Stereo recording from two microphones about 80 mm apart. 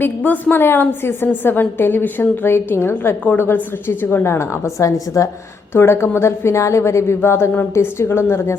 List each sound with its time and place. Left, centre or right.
0.0 s a woman's voice: centre; by 5.3 s left
5.7 s a woman's voice: left